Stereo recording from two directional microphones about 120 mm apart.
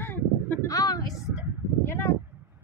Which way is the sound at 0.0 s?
15° left (ahead or behind).